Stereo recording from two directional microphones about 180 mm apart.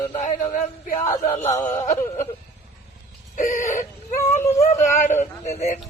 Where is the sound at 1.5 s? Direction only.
40° left (ahead or behind).